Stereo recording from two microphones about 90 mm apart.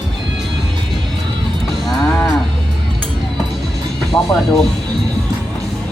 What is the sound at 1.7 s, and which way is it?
Moo, centre (ahead or behind).